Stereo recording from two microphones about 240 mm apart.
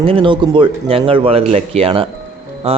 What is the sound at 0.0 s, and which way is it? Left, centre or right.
Speech, right.